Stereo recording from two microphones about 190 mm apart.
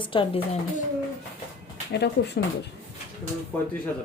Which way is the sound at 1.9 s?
60° left (ahead or behind).